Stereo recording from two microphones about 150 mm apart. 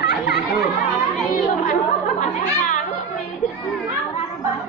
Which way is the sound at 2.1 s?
60° left (ahead or behind).